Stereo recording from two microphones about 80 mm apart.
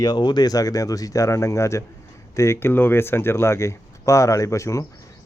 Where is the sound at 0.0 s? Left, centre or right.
Left.